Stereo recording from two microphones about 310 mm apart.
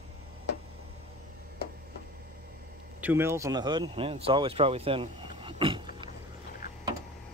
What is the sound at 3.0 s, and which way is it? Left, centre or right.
Speech, centre.